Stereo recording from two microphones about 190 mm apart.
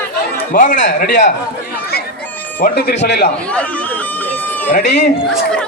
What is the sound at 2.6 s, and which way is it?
Speech, 55° left (ahead or behind).